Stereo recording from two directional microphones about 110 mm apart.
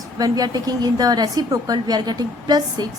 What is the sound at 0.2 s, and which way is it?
A woman's voice, 35° right (ahead or behind).